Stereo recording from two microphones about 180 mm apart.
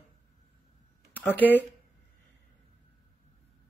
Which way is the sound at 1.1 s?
10° left (ahead or behind).